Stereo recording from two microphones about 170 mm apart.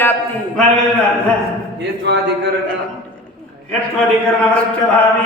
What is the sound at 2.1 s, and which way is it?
Speech, 90° right.